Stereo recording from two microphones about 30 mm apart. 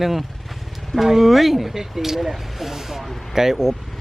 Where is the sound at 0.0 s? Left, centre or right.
Centre.